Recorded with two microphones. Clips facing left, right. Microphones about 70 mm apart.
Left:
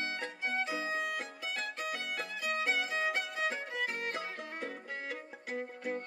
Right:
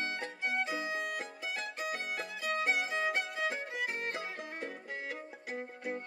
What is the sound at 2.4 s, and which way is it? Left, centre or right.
Music, right.